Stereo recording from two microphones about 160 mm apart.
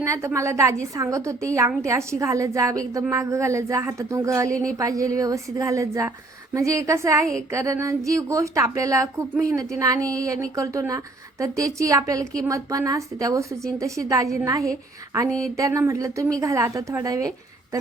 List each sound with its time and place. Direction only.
0.0 s a woman's voice: 20° right (ahead or behind)
15.5 s a woman's voice: 20° right (ahead or behind)